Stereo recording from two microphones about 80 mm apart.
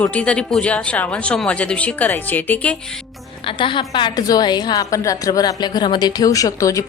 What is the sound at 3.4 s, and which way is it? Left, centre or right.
Speech, left.